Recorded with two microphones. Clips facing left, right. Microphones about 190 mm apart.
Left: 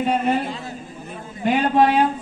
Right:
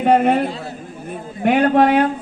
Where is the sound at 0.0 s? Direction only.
60° right (ahead or behind).